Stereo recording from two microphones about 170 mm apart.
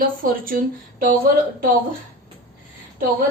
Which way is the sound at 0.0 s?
55° right (ahead or behind).